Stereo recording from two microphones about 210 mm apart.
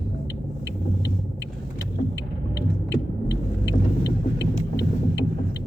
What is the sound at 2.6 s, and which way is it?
Car, 55° left (ahead or behind).